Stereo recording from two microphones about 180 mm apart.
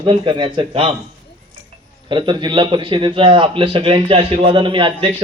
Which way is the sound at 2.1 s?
25° right (ahead or behind).